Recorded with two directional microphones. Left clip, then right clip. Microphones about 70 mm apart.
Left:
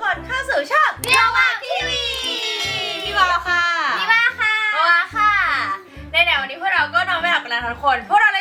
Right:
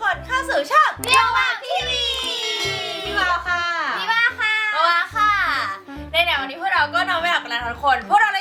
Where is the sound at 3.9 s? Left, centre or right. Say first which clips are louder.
Left 2 dB; centre.